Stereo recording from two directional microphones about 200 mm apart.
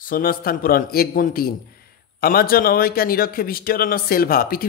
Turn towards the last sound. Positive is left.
turn(degrees=50)  # may be behind; listen again after turning